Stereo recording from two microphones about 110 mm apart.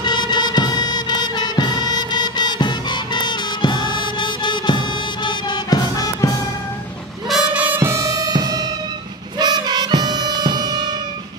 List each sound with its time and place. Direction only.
0.0 s music: 40° left (ahead or behind)
7.2 s music: 5° right (ahead or behind)
7.6 s music: 20° right (ahead or behind); by 10.9 s 40° right (ahead or behind)